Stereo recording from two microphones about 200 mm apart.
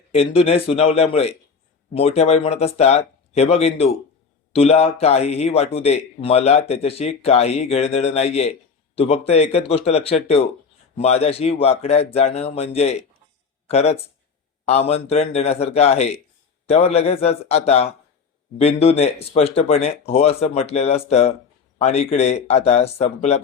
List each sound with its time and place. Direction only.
0.1 s speech: 30° left (ahead or behind)